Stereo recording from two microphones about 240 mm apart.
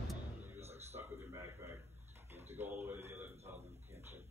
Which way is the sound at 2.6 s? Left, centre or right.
Centre.